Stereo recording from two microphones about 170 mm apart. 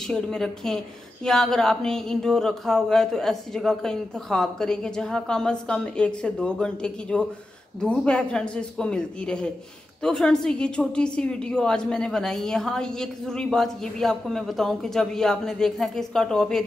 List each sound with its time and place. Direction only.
0.0 s a woman's voice: 5° left (ahead or behind)